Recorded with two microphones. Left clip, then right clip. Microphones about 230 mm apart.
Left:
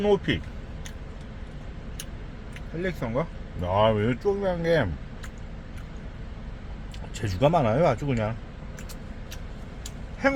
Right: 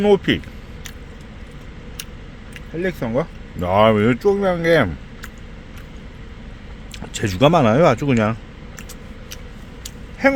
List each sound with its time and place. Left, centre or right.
0.0 s speech: right
2.8 s speech: right
7.1 s speech: right
9.8 s a sound: right